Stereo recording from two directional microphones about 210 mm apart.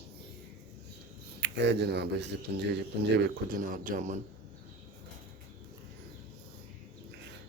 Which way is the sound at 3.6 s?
40° right (ahead or behind).